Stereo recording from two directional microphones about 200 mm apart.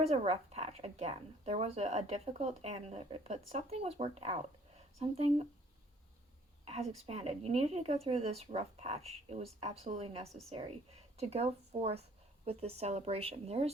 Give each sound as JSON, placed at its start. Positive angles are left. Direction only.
{"t": 0.0, "sound": "speech", "side_deg": -30}
{"t": 6.7, "sound": "a woman's voice", "side_deg": -30}